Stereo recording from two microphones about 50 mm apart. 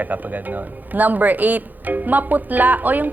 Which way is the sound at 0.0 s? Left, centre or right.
Right.